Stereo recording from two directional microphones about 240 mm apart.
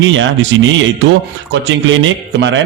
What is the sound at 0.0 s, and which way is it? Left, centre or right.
Speech, right.